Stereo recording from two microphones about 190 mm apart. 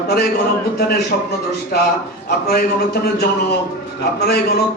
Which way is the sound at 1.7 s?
50° left (ahead or behind).